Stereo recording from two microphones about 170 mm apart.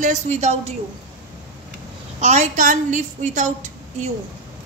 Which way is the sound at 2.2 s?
45° right (ahead or behind).